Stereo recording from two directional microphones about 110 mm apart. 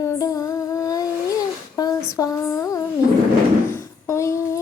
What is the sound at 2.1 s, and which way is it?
Female singing, 30° left (ahead or behind).